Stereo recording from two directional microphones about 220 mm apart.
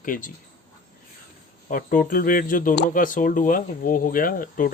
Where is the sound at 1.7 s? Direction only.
40° left (ahead or behind).